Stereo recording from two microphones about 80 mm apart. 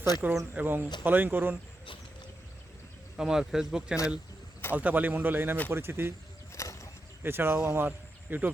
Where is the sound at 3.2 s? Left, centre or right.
Centre.